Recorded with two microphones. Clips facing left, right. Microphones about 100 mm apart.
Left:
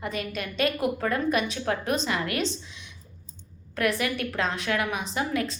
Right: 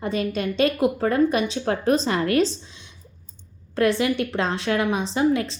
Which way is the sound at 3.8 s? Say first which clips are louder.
Right 6 dB; 25° right (ahead or behind).